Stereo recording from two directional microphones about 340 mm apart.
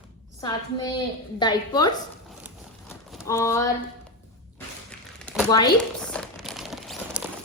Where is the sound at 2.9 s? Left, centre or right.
Centre.